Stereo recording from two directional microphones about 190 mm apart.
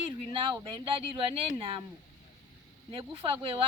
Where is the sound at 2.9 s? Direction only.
30° right (ahead or behind).